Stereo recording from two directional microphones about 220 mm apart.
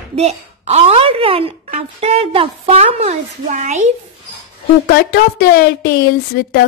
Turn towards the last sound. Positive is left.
turn(degrees=45)  # may be behind; listen again after turning